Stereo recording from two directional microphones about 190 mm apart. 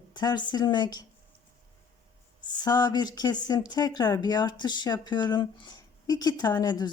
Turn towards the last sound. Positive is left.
turn(degrees=20)  # may be behind; listen again after turning